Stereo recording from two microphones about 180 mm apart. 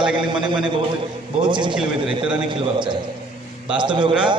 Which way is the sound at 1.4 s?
25° right (ahead or behind).